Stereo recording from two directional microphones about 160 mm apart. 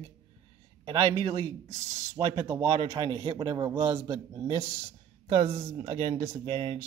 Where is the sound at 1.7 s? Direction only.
20° right (ahead or behind).